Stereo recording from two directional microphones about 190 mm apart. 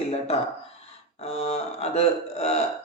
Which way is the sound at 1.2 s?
35° left (ahead or behind).